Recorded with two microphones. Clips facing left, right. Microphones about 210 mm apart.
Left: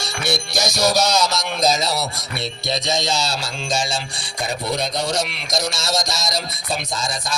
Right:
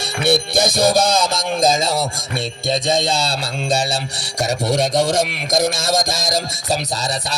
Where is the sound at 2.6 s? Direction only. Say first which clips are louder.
Right 4 dB; 50° right (ahead or behind).